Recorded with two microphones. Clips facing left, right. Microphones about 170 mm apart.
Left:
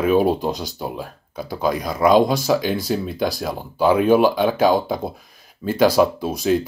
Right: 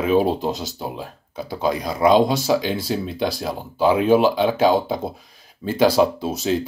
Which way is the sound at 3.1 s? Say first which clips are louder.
Left 1 dB; 25° right (ahead or behind).